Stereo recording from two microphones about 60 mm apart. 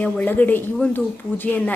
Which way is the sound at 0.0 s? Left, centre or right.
Left.